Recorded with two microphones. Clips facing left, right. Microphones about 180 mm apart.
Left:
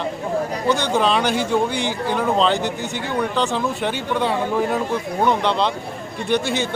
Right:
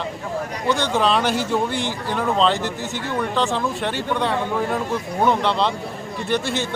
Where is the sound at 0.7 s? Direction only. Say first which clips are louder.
Even; centre (ahead or behind).